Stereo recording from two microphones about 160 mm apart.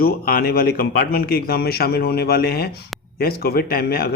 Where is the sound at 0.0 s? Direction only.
70° left (ahead or behind).